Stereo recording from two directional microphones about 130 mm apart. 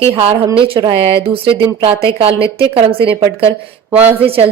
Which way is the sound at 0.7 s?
40° right (ahead or behind).